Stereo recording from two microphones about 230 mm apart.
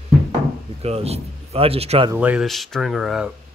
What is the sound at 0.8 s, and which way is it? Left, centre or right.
Speech, right.